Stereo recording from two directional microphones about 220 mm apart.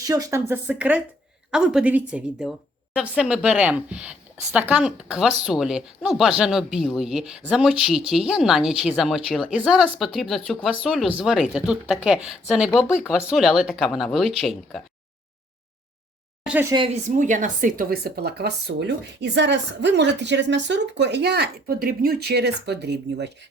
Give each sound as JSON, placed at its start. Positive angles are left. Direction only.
{"t": 0.0, "sound": "a woman's voice", "side_deg": -15}
{"t": 16.5, "sound": "speech", "side_deg": -10}
{"t": 16.7, "sound": "speech", "side_deg": -25}
{"t": 17.2, "sound": "speech", "side_deg": -35}